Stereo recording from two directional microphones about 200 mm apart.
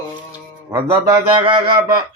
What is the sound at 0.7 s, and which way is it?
A man's voice, 20° right (ahead or behind).